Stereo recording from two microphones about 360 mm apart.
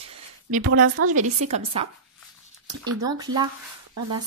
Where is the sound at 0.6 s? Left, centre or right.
Right.